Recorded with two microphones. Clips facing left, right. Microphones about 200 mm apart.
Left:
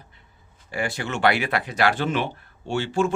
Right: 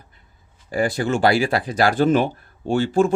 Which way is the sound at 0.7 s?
35° right (ahead or behind).